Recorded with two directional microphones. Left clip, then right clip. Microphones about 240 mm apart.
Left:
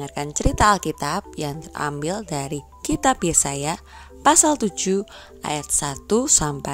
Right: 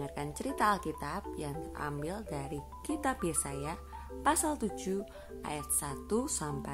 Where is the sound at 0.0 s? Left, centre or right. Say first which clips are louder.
Left 13 dB; left.